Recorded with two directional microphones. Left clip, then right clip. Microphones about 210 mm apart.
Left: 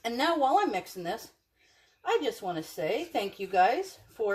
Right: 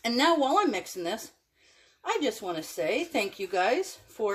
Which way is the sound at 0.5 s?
40° right (ahead or behind).